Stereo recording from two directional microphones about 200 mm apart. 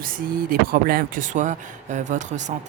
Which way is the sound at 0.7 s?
45° right (ahead or behind).